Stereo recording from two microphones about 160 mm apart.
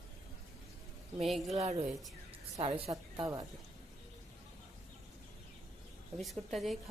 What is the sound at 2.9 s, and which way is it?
Speech, 20° right (ahead or behind).